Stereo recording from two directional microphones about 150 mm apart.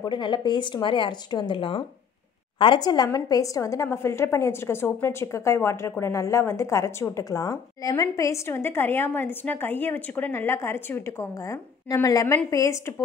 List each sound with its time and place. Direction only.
0.0 s a woman's voice: 30° left (ahead or behind)